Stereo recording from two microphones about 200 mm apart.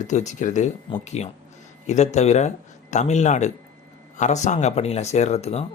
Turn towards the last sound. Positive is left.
turn(degrees=30)  # may be behind; listen again after turning